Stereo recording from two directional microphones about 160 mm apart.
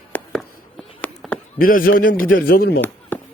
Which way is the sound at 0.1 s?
5° left (ahead or behind).